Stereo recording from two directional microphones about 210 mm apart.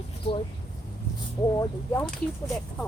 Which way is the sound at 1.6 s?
15° left (ahead or behind).